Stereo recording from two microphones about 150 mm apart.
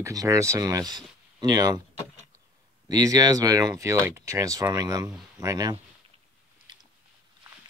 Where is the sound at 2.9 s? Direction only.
25° right (ahead or behind).